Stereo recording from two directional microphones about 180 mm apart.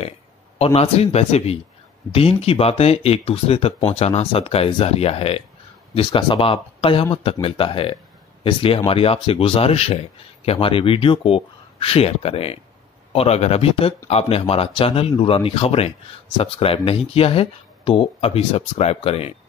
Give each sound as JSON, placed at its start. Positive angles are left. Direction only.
{"t": 0.7, "sound": "speech", "side_deg": 35}